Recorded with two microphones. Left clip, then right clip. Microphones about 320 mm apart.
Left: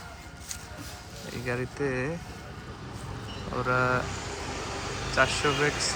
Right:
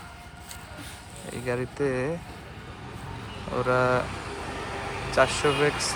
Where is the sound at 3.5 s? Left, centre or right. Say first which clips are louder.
Right 3 dB; centre.